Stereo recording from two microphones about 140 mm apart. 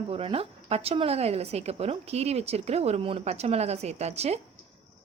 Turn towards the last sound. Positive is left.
turn(degrees=-50)  # may be behind; listen again after turning